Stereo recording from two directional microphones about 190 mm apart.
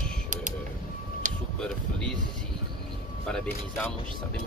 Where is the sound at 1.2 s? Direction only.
40° right (ahead or behind).